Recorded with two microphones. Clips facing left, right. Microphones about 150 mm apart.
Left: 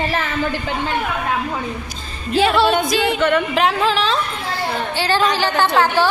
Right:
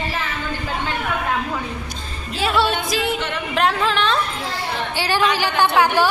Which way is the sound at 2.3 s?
Centre (ahead or behind).